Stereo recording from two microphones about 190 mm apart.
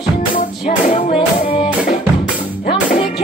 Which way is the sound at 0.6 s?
35° left (ahead or behind).